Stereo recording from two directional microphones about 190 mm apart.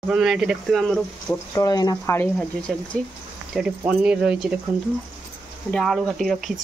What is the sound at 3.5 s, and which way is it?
Speech, 5° right (ahead or behind).